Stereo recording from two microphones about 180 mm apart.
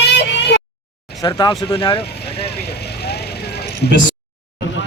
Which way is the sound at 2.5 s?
65° left (ahead or behind).